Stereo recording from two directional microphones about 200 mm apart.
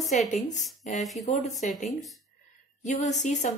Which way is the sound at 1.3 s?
35° left (ahead or behind).